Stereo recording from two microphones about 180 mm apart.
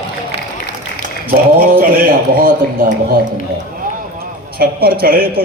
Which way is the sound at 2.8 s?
50° right (ahead or behind).